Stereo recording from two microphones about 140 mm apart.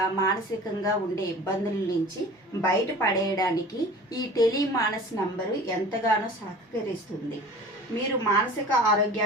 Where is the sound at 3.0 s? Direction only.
25° left (ahead or behind).